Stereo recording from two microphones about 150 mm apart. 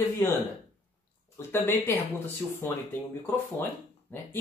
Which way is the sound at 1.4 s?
15° left (ahead or behind).